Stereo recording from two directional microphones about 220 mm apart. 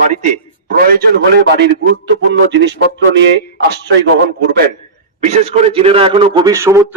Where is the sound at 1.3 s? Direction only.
50° right (ahead or behind).